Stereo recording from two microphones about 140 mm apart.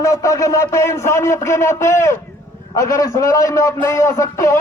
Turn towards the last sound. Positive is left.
turn(degrees=20)  # may be behind; listen again after turning